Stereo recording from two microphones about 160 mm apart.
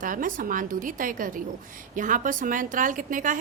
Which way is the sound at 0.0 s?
55° right (ahead or behind).